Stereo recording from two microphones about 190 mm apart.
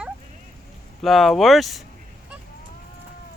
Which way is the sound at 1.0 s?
Centre (ahead or behind).